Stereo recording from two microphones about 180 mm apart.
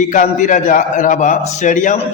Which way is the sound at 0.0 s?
45° left (ahead or behind).